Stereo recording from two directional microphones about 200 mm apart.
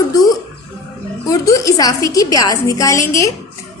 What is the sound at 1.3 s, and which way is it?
A woman's voice, 15° left (ahead or behind).